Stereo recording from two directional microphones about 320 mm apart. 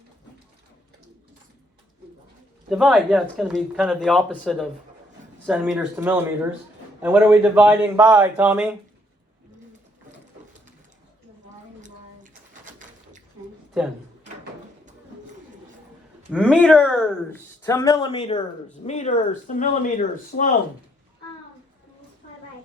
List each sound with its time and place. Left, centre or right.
2.6 s speech: centre
11.8 s pigeon: right
16.3 s speech: centre; by 20.6 s left